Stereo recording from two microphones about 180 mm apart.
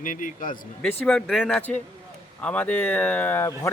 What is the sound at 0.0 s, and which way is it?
Speech, 45° left (ahead or behind).